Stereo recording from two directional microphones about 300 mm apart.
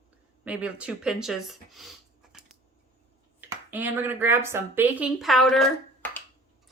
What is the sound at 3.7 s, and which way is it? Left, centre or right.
A woman's voice, centre.